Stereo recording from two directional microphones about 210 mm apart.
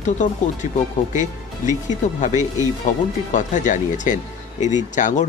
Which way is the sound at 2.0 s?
35° left (ahead or behind).